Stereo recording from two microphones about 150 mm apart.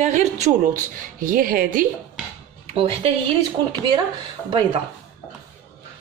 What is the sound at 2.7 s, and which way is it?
Speech, 40° right (ahead or behind).